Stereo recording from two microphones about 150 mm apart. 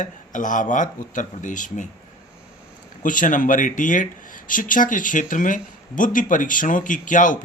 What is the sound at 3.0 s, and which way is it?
A man's voice, 60° left (ahead or behind).